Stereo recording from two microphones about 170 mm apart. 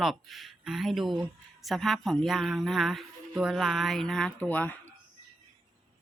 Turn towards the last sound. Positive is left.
turn(degrees=10)  # may be behind; listen again after turning